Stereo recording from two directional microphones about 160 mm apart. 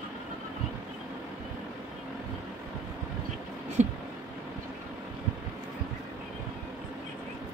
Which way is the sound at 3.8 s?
45° right (ahead or behind).